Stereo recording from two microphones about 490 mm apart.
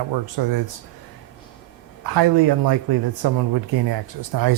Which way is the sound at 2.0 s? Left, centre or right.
Right.